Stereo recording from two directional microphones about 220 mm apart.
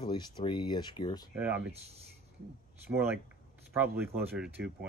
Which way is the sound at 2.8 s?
10° right (ahead or behind).